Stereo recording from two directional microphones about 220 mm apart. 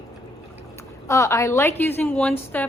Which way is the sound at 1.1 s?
15° left (ahead or behind).